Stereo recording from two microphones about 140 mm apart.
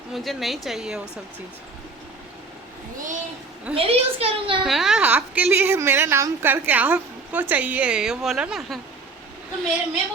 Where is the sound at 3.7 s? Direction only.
45° right (ahead or behind).